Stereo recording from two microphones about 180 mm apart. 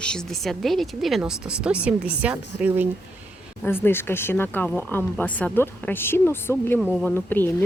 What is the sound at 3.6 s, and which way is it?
A woman's voice, 10° left (ahead or behind).